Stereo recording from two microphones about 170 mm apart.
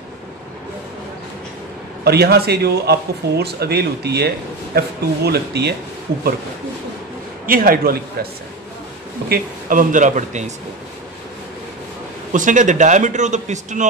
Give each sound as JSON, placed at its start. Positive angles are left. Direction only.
{"t": 2.0, "sound": "speech", "side_deg": -70}
{"t": 7.4, "sound": "a man's voice", "side_deg": -55}
{"t": 9.3, "sound": "a man's voice", "side_deg": -55}
{"t": 12.3, "sound": "a man's voice", "side_deg": -50}